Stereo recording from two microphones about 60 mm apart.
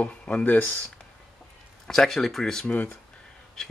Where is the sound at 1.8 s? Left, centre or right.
Centre.